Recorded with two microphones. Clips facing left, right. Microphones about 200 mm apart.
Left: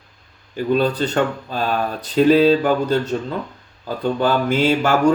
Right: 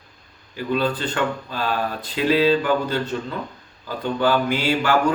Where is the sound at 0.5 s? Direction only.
45° left (ahead or behind).